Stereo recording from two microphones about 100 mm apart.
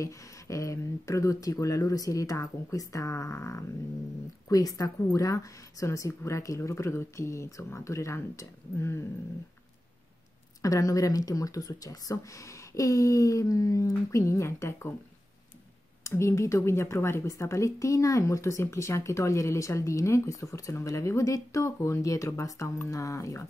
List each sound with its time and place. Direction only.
0.0 s speech: 30° left (ahead or behind)
10.6 s speech: 35° left (ahead or behind)
16.0 s speech: 30° left (ahead or behind)